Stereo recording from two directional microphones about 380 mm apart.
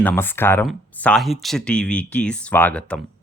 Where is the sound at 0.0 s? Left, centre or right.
Centre.